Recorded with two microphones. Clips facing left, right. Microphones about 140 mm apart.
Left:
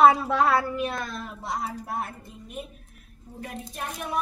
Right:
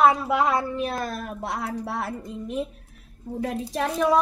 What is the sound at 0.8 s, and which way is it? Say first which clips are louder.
A woman's voice: right 2 dB; 35° right (ahead or behind).